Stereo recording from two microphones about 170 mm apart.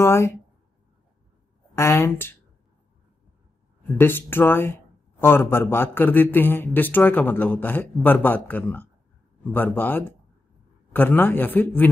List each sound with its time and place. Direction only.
0.0 s speech: 15° left (ahead or behind)
1.8 s speech: 15° left (ahead or behind)
3.8 s speech: 10° left (ahead or behind)